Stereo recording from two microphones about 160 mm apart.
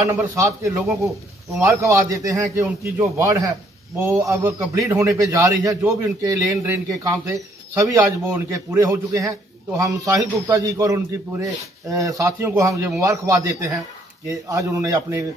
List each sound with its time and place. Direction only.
0.0 s a man's voice: 20° right (ahead or behind)